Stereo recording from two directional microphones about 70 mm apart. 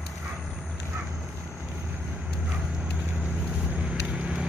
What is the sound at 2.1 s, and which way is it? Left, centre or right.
Vehicle, centre.